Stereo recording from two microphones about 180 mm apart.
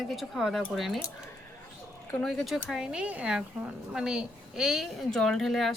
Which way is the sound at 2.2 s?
Centre (ahead or behind).